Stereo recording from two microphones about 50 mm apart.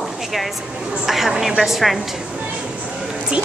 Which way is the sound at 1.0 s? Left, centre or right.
Centre.